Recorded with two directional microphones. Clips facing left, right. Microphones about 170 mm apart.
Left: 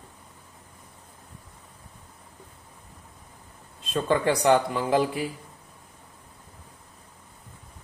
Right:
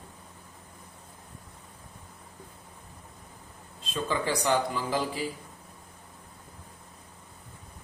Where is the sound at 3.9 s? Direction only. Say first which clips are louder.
Left 6 dB; 55° left (ahead or behind).